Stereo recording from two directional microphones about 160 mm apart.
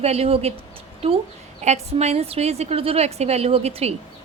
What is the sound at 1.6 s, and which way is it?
A woman's voice, 45° right (ahead or behind).